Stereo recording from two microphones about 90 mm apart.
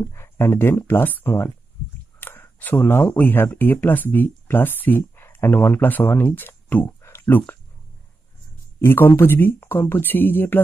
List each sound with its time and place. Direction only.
0.0 s speech: 30° left (ahead or behind)
7.0 s a sound: 25° left (ahead or behind)
8.8 s speech: 25° left (ahead or behind)